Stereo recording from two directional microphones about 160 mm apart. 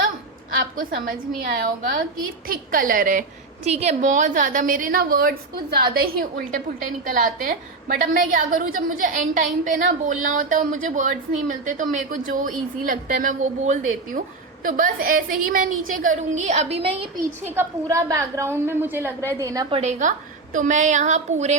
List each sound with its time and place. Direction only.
0.5 s a woman's voice: 60° right (ahead or behind)
7.0 s a woman's voice: 55° right (ahead or behind); by 17.1 s 35° right (ahead or behind)
17.5 s a woman's voice: 15° right (ahead or behind)
19.7 s a woman's voice: 45° right (ahead or behind)